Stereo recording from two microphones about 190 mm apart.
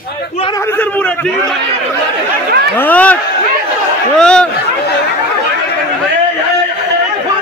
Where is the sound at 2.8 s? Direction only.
10° left (ahead or behind).